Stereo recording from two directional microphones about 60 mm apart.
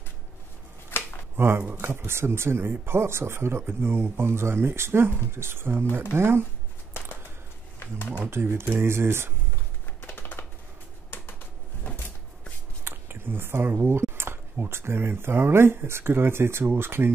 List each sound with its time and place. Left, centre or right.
0.9 s a sound: left
1.3 s speech: right
7.8 s speech: left
8.3 s speech: right
10.0 s typing: left
12.8 s speech: right